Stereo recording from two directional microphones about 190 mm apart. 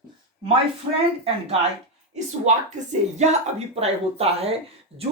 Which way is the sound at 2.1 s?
40° right (ahead or behind).